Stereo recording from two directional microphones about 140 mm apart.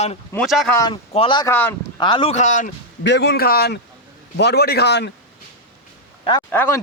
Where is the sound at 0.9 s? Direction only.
35° left (ahead or behind).